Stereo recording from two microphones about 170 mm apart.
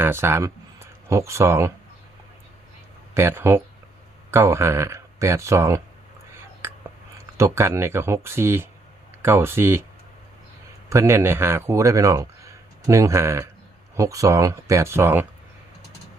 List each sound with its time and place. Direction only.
0.0 s speech: 15° right (ahead or behind)
3.2 s speech: 15° right (ahead or behind)
6.6 s whispering: 15° right (ahead or behind)
7.3 s speech: 15° right (ahead or behind)
10.8 s speech: 15° right (ahead or behind)